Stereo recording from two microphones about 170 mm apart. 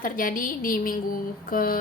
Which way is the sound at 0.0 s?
55° left (ahead or behind).